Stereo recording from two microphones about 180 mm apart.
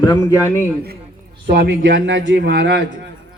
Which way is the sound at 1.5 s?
80° right.